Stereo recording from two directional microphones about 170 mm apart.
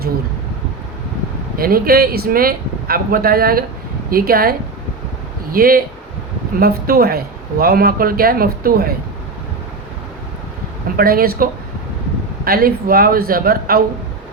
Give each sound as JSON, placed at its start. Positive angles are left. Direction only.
{"t": 1.5, "sound": "a man's voice", "side_deg": -60}
{"t": 10.9, "sound": "speech", "side_deg": -60}
{"t": 12.5, "sound": "speech", "side_deg": -60}